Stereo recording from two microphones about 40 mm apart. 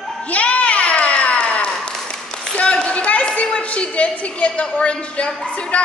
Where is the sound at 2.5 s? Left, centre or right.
Left.